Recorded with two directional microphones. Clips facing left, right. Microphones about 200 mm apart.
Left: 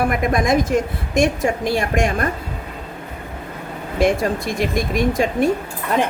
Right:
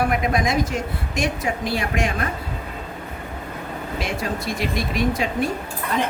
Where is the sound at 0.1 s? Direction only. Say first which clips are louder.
Left 4 dB; 50° left (ahead or behind).